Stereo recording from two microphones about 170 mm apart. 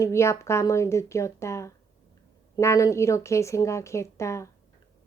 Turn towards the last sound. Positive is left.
turn(degrees=15)  # may be behind; listen again after turning